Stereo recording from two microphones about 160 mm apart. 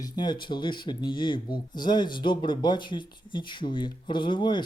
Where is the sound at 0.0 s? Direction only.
25° left (ahead or behind).